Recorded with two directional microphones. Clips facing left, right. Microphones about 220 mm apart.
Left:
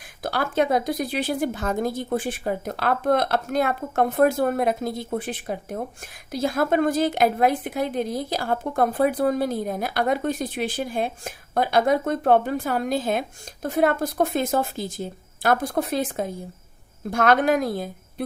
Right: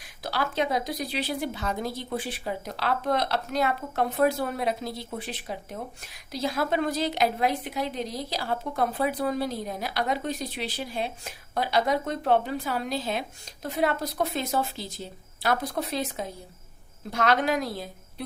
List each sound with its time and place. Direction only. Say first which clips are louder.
0.2 s a woman's voice: left 5 dB; 50° left (ahead or behind)